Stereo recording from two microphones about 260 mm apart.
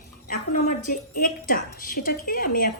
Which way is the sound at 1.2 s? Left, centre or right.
Left.